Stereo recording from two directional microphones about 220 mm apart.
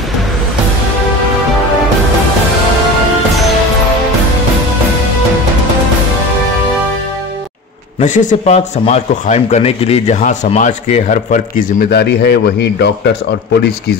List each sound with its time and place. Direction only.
8.0 s a man's voice: 35° left (ahead or behind); by 13.9 s 50° left (ahead or behind)